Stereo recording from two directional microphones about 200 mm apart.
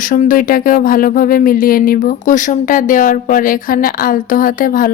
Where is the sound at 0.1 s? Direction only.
45° left (ahead or behind).